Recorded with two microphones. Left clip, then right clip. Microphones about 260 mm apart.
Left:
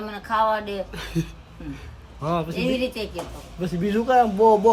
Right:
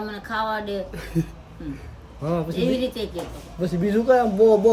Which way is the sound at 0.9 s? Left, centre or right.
Centre.